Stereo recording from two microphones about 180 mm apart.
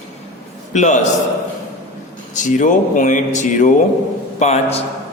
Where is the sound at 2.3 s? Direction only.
45° left (ahead or behind).